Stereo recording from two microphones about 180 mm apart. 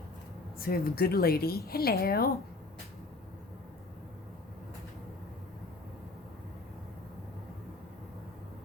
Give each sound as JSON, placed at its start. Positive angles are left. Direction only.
{"t": 0.6, "sound": "speech", "side_deg": 55}